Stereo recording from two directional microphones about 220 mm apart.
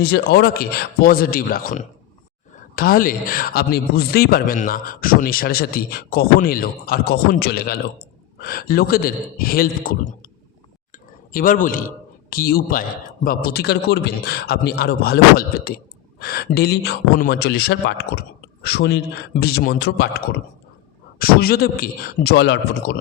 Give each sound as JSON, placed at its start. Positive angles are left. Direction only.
{"t": 0.0, "sound": "a man's voice", "side_deg": 45}
{"t": 11.3, "sound": "a man's voice", "side_deg": 40}